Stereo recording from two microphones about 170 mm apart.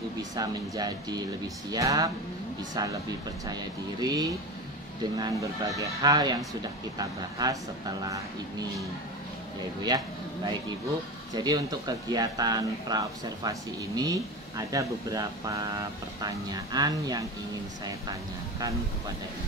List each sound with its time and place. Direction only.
0.2 s speech: 25° right (ahead or behind)
9.8 s speech: 25° right (ahead or behind)